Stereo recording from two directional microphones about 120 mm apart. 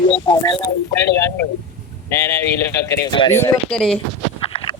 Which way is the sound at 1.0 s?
20° left (ahead or behind).